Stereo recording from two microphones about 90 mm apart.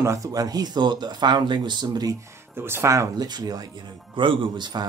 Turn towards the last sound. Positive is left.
turn(degrees=-55)  # may be behind; listen again after turning